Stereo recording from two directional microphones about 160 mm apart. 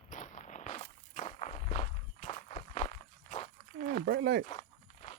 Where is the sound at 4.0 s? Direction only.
90° right.